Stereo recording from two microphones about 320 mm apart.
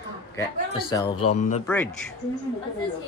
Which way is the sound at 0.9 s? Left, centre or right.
Centre.